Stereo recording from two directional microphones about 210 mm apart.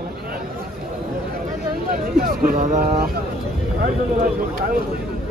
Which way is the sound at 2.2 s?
45° right (ahead or behind).